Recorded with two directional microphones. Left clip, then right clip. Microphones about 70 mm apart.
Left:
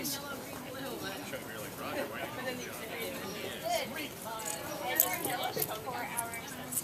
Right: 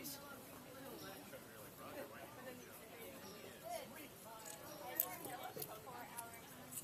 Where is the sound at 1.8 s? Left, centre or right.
Left.